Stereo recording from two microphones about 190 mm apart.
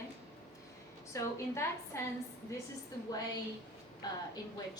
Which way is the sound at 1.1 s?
15° left (ahead or behind).